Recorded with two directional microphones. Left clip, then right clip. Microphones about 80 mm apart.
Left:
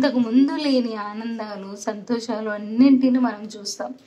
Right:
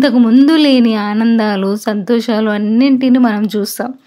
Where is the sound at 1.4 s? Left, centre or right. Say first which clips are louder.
Right 17 dB; right.